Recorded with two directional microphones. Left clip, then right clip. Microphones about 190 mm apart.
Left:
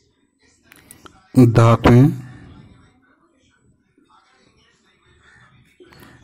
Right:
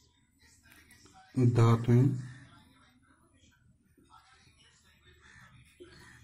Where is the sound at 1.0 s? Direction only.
35° left (ahead or behind).